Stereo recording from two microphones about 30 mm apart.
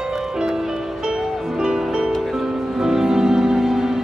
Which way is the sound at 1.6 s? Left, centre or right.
Right.